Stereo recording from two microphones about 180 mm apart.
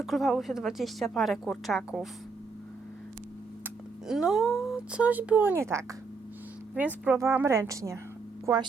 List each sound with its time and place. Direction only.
0.0 s a woman's voice: centre (ahead or behind)
4.0 s speech: 5° right (ahead or behind)